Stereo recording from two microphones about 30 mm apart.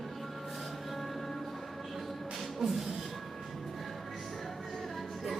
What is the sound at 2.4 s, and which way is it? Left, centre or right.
Music, centre.